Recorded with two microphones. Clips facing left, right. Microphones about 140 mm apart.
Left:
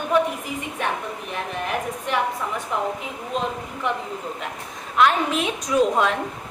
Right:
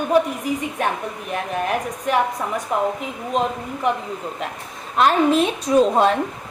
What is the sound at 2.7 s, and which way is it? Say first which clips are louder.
Speech: right 5 dB; 45° right (ahead or behind).